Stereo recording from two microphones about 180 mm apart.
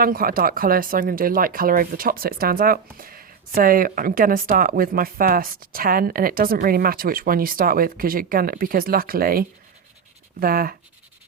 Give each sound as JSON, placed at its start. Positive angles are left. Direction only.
{"t": 0.0, "sound": "speech", "side_deg": -55}